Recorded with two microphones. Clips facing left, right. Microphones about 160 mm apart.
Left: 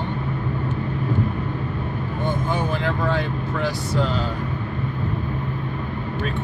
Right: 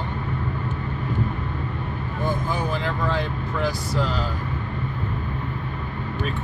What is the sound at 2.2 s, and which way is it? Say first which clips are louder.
Speech: left 1 dB; centre (ahead or behind).